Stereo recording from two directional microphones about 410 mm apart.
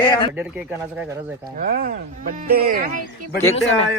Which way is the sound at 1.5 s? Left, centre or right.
Right.